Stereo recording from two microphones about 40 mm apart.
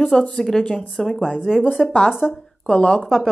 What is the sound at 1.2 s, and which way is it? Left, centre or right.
A woman's voice, centre.